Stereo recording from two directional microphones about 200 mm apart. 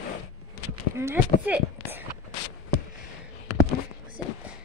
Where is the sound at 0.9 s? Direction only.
10° right (ahead or behind).